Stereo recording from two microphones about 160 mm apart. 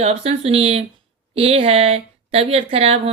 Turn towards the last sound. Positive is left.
turn(degrees=-40)  # may be behind; listen again after turning